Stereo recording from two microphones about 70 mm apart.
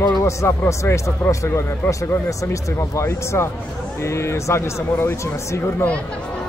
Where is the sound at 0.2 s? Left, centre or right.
Left.